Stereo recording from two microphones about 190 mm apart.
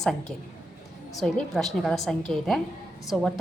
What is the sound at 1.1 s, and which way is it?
A woman's voice, centre (ahead or behind).